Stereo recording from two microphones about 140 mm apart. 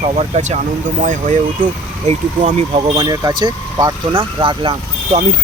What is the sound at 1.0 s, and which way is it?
Speech, 65° right (ahead or behind).